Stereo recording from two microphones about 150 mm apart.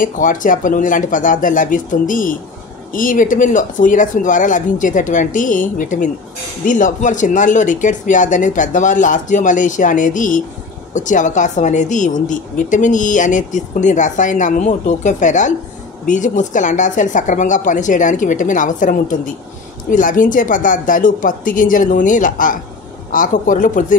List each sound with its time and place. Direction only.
0.0 s speech: 60° left (ahead or behind)